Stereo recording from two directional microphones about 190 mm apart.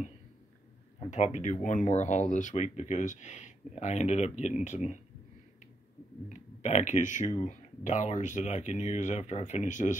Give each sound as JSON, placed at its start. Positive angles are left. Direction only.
{"t": 1.1, "sound": "speech", "side_deg": 40}
{"t": 6.2, "sound": "speech", "side_deg": 40}